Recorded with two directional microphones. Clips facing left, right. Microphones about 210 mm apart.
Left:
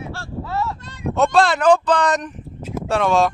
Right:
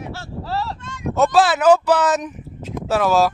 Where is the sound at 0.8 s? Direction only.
35° left (ahead or behind).